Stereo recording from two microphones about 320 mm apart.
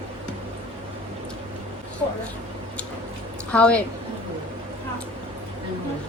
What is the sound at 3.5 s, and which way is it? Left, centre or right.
Speech, centre.